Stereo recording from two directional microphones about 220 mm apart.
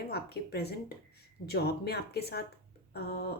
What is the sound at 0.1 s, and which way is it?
Speech, 45° left (ahead or behind).